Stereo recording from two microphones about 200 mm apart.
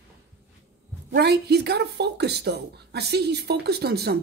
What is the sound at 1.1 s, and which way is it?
Speech, 55° right (ahead or behind).